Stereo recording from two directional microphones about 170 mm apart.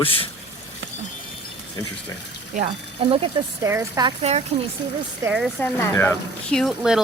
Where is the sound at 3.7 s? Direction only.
15° right (ahead or behind).